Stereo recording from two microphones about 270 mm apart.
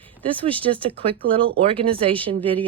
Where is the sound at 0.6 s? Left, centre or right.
Centre.